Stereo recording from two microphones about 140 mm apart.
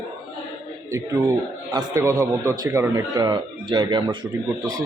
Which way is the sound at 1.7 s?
25° right (ahead or behind).